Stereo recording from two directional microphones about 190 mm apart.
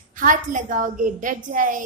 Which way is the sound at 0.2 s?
45° right (ahead or behind).